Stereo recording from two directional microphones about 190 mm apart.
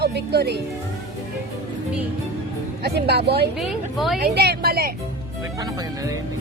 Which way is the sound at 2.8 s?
60° right (ahead or behind).